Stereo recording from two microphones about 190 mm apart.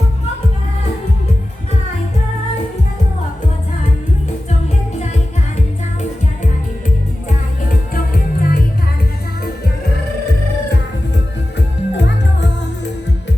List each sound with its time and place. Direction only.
7.9 s music: 50° left (ahead or behind)
11.5 s music: 65° left (ahead or behind)